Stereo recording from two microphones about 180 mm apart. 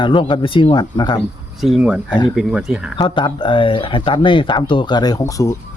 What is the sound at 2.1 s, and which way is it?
Speech, 25° left (ahead or behind).